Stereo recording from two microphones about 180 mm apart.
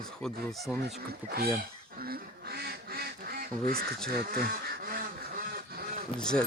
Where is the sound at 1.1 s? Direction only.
60° right (ahead or behind).